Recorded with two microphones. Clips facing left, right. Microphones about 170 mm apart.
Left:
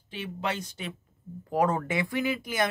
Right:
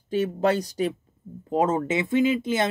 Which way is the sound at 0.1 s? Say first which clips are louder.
Right 11 dB; 45° right (ahead or behind).